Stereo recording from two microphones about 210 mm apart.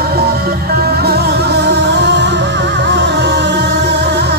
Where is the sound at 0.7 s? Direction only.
50° right (ahead or behind).